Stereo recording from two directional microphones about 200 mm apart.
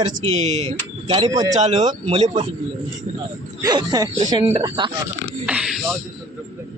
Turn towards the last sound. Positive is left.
turn(degrees=0)  # may be behind; listen again after turning